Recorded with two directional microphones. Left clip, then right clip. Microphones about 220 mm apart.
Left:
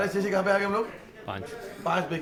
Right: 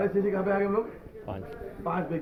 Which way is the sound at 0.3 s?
30° left (ahead or behind).